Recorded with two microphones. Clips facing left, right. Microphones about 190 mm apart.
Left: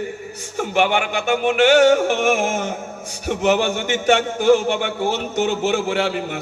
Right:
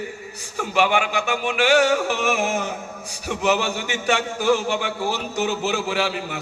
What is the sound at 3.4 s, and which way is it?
A man's voice, 55° left (ahead or behind).